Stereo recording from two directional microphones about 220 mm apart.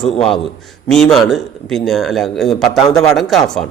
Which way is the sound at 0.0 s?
Centre (ahead or behind).